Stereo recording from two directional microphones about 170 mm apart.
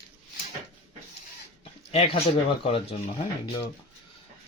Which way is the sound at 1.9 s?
35° left (ahead or behind).